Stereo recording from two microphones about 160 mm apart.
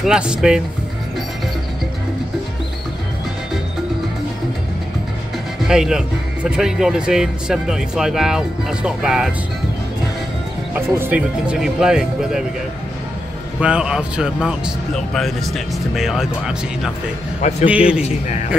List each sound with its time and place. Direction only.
0.0 s speech: 5° right (ahead or behind)
5.6 s speech: 5° right (ahead or behind)
10.9 s speech: 10° right (ahead or behind)
13.6 s a man's voice: 5° right (ahead or behind)
18.0 s a man's voice: 45° left (ahead or behind)